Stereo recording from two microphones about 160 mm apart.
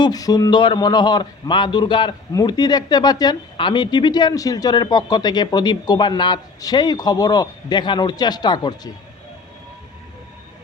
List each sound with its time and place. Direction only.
0.0 s speech: 25° left (ahead or behind)